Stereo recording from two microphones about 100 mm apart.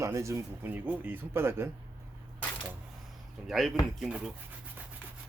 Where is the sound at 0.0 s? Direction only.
30° right (ahead or behind).